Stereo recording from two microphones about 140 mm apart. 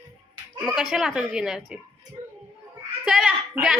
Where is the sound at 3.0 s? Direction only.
Centre (ahead or behind).